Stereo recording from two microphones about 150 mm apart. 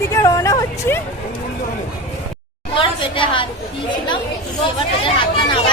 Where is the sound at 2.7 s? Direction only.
35° left (ahead or behind).